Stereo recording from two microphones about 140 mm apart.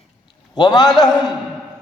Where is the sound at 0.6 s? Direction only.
30° left (ahead or behind).